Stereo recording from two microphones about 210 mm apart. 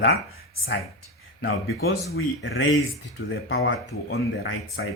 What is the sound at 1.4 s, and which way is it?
Speech, 50° left (ahead or behind).